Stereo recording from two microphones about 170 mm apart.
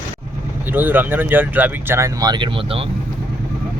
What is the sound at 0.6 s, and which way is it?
Speech, 10° right (ahead or behind).